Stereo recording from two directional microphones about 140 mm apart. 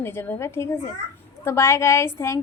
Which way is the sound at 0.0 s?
15° left (ahead or behind).